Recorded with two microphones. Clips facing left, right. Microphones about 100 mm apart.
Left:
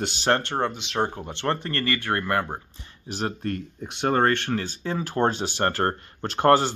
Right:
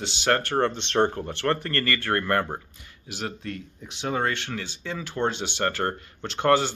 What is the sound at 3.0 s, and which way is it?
Speech, 40° left (ahead or behind).